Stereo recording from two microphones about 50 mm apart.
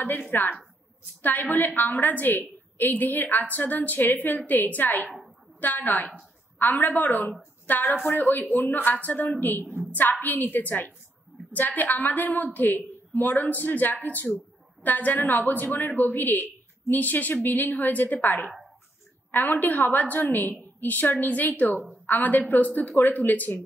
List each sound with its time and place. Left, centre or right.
0.3 s a woman's voice: left